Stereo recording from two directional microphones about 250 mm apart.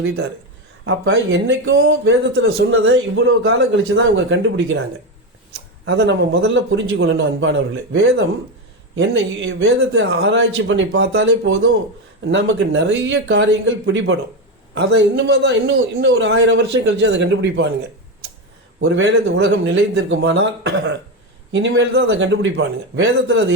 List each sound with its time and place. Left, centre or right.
0.9 s speech: right